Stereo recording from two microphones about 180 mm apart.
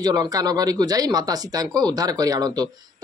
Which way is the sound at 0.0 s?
20° right (ahead or behind).